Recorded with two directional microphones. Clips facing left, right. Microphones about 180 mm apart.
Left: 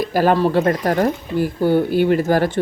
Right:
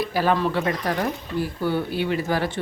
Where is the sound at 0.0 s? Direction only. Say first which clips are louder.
Left 6 dB; 45° left (ahead or behind).